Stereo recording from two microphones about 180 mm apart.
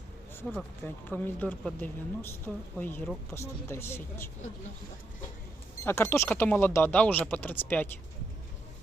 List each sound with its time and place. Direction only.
1.1 s speech: 10° left (ahead or behind)
5.8 s speech: 15° left (ahead or behind)